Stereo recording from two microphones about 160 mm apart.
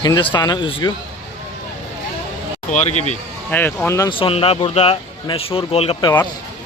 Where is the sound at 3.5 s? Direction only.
10° left (ahead or behind).